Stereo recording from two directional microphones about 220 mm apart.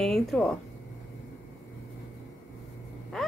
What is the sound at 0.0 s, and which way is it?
Speech, centre (ahead or behind).